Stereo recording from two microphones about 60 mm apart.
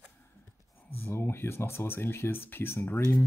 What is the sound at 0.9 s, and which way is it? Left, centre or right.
Speech, left.